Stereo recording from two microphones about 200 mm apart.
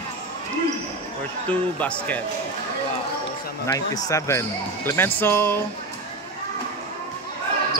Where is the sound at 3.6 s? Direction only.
15° left (ahead or behind).